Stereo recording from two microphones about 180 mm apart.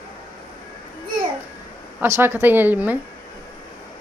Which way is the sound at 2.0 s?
15° right (ahead or behind).